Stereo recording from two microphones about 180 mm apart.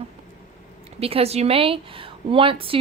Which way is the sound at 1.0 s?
35° right (ahead or behind).